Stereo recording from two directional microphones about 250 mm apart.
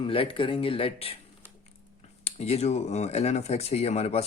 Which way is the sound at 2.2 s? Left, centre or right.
Left.